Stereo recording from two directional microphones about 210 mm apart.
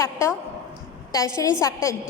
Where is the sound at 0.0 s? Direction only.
15° left (ahead or behind).